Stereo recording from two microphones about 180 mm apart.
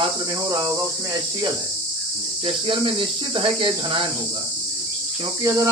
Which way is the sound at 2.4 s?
30° right (ahead or behind).